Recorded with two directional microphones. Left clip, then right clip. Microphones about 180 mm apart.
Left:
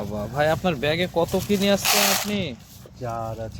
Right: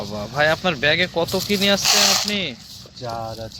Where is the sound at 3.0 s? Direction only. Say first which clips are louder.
Right 1 dB; 15° left (ahead or behind).